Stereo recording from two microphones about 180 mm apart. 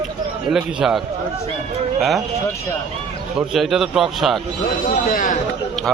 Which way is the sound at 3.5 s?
Centre (ahead or behind).